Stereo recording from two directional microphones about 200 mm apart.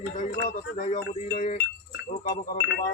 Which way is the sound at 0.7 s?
40° left (ahead or behind).